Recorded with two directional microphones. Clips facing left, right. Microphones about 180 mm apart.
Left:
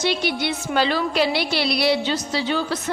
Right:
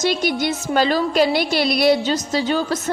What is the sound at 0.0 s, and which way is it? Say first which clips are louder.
A woman's voice: right 3 dB; 45° right (ahead or behind).